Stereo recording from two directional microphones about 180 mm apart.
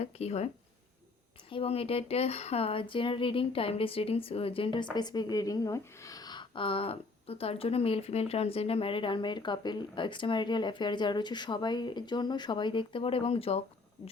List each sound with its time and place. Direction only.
0.0 s speech: 35° left (ahead or behind)